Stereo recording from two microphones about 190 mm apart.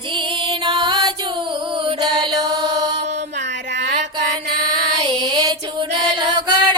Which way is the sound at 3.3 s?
65° right (ahead or behind).